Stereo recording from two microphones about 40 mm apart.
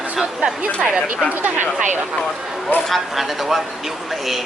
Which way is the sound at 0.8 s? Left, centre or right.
Right.